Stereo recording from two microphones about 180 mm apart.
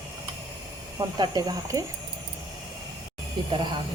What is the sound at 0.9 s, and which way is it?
Speech, 20° right (ahead or behind).